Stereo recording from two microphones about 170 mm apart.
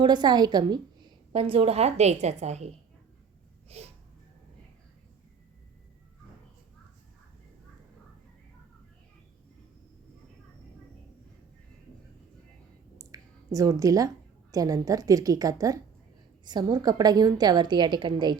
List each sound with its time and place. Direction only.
0.0 s a woman's voice: 25° right (ahead or behind)
3.7 s a sound: 35° right (ahead or behind)
13.0 s clicking: 20° right (ahead or behind)
14.5 s a woman's voice: 20° right (ahead or behind)